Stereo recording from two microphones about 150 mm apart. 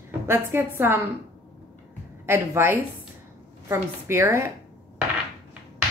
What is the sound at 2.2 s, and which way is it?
Speech, 15° right (ahead or behind).